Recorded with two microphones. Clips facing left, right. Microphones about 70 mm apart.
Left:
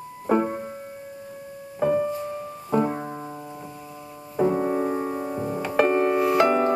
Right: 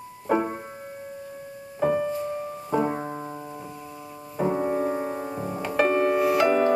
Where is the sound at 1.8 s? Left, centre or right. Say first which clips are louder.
Left 1 dB; right.